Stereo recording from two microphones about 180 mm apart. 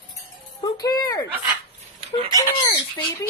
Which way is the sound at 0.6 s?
20° left (ahead or behind).